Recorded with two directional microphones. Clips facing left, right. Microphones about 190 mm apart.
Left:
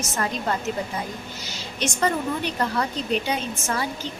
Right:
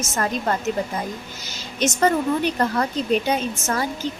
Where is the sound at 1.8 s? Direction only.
45° right (ahead or behind).